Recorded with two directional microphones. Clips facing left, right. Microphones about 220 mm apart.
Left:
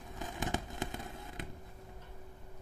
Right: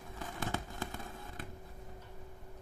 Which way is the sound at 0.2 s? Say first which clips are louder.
Left 2 dB; 15° left (ahead or behind).